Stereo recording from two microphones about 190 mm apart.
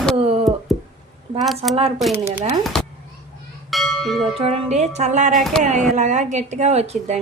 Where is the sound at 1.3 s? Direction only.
Centre (ahead or behind).